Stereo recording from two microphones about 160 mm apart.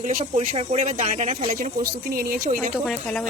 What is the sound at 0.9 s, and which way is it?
Speech, 55° right (ahead or behind).